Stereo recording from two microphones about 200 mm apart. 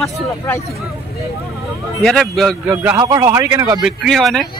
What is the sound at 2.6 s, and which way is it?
A man's voice, 10° right (ahead or behind).